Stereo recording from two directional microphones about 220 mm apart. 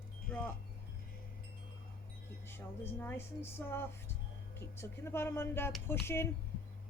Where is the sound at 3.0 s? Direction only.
10° left (ahead or behind).